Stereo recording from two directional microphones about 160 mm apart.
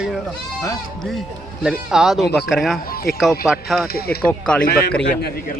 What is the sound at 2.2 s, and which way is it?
Speech, 90° left.